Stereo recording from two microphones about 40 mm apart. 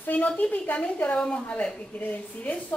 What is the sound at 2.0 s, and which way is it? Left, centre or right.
Speech, left.